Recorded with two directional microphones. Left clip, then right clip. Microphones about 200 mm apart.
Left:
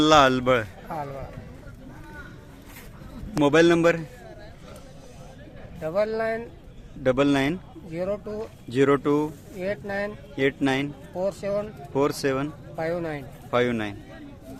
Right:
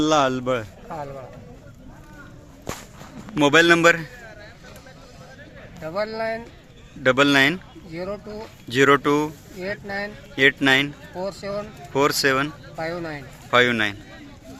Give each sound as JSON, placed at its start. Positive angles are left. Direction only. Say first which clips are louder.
{"t": 0.0, "sound": "a man's voice", "louder": "left 2 dB", "side_deg": 5}
{"t": 3.3, "sound": "a man's voice", "louder": "right 3 dB", "side_deg": 0}
{"t": 6.0, "sound": "speech", "louder": "left 1 dB", "side_deg": 35}
{"t": 7.0, "sound": "a man's voice", "louder": "right 5 dB", "side_deg": 5}
{"t": 7.9, "sound": "speech", "louder": "left 2 dB", "side_deg": 35}
{"t": 8.7, "sound": "a man's voice", "louder": "right 4 dB", "side_deg": 0}
{"t": 9.6, "sound": "speech", "louder": "even", "side_deg": 35}
{"t": 10.3, "sound": "a man's voice", "louder": "right 8 dB", "side_deg": 0}
{"t": 11.2, "sound": "speech", "louder": "left 2 dB", "side_deg": 35}
{"t": 11.9, "sound": "a man's voice", "louder": "right 5 dB", "side_deg": 0}
{"t": 12.7, "sound": "speech", "louder": "left 4 dB", "side_deg": 30}
{"t": 13.5, "sound": "a man's voice", "louder": "right 6 dB", "side_deg": 0}